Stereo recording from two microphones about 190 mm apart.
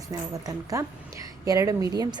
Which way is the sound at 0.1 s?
20° right (ahead or behind).